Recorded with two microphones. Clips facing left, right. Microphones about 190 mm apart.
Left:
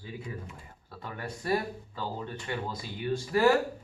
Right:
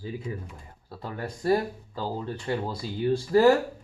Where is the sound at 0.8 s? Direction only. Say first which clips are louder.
Right 4 dB; 35° right (ahead or behind).